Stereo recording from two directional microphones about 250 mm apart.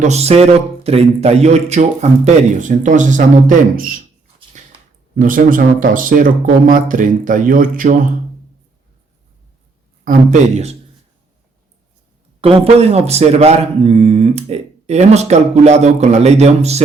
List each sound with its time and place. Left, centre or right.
0.0 s speech: right
4.6 s a sound: right
5.1 s speech: right
12.4 s speech: right